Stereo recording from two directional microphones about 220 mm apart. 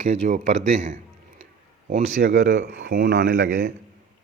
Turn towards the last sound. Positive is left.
turn(degrees=-40)  # may be behind; listen again after turning